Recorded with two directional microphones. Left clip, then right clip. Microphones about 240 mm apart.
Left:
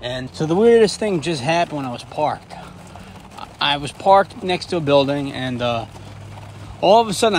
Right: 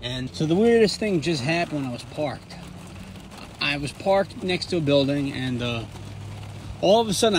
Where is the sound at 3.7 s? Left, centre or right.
Left.